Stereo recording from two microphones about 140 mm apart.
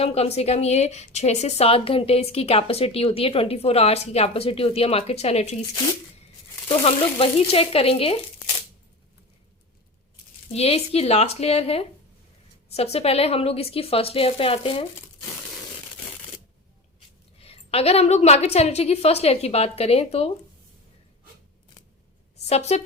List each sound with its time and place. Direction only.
0.0 s a woman's voice: 45° left (ahead or behind)
6.7 s a woman's voice: 45° left (ahead or behind)
10.5 s a woman's voice: 45° left (ahead or behind)
17.4 s a woman's voice: 45° left (ahead or behind)
22.4 s a woman's voice: 50° left (ahead or behind)